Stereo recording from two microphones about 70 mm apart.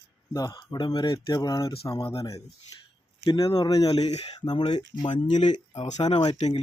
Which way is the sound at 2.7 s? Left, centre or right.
Left.